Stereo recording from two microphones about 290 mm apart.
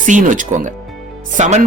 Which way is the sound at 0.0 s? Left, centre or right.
Right.